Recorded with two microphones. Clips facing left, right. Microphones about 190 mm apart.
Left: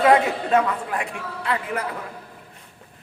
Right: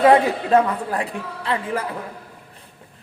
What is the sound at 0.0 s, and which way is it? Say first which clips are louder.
A man's voice: right 3 dB; 30° right (ahead or behind).